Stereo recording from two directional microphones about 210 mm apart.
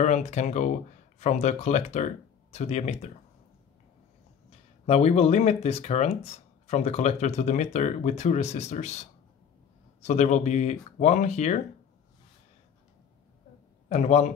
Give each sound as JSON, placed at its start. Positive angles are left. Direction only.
{"t": 0.0, "sound": "speech", "side_deg": 35}
{"t": 4.5, "sound": "speech", "side_deg": 30}
{"t": 10.0, "sound": "speech", "side_deg": 35}
{"t": 13.8, "sound": "a man's voice", "side_deg": 30}